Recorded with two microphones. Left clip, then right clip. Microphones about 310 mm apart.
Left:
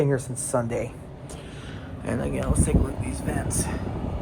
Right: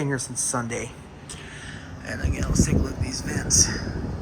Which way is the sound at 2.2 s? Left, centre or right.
Centre.